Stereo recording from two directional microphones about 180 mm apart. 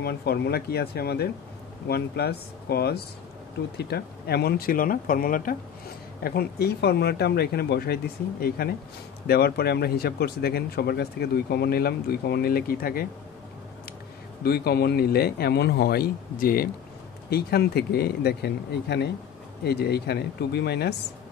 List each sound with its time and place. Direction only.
0.0 s speech: 65° left (ahead or behind)
14.4 s speech: 60° left (ahead or behind)